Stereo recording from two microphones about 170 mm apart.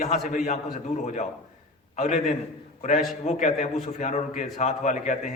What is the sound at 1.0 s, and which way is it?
A man's voice, 45° left (ahead or behind).